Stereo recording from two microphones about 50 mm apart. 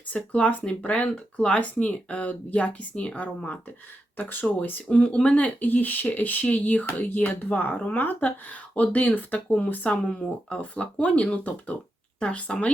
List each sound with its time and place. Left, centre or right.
0.3 s speech: left
4.9 s speech: left
5.6 s speech: left